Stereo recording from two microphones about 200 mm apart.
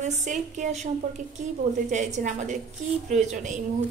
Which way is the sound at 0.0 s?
40° right (ahead or behind).